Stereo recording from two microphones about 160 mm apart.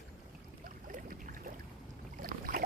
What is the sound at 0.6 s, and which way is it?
Boat, 60° right (ahead or behind).